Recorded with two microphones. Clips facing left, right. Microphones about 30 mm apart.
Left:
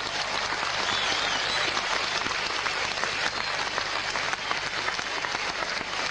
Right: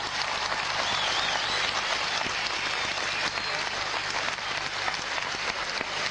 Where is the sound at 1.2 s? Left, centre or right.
Left.